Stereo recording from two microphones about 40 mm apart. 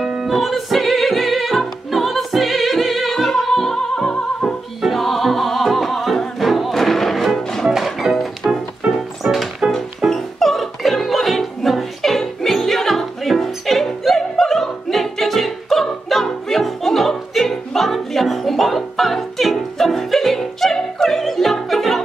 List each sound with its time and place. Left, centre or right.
0.0 s music: centre
0.3 s music: centre
4.8 s music: centre
8.8 s music: centre
9.2 s music: right
9.7 s music: centre
20.7 s opera: centre